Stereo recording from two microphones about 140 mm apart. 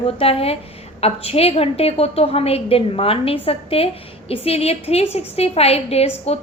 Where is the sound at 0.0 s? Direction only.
45° left (ahead or behind).